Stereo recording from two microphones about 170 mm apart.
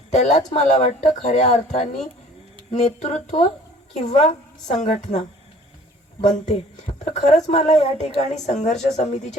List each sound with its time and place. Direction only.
0.1 s speech: 45° left (ahead or behind)
6.2 s speech: 40° left (ahead or behind)